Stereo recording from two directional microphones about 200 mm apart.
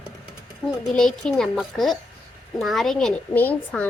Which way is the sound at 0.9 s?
5° left (ahead or behind).